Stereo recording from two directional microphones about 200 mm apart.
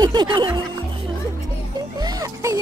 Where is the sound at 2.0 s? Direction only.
15° right (ahead or behind).